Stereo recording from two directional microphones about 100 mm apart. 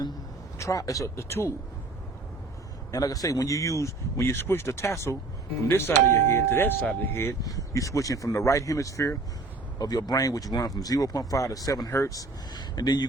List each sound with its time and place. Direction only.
0.6 s speech: 35° left (ahead or behind)
2.9 s speech: 35° left (ahead or behind)
7.4 s speech: 35° left (ahead or behind)